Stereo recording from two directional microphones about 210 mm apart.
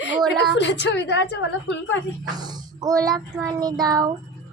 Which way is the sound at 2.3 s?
20° right (ahead or behind).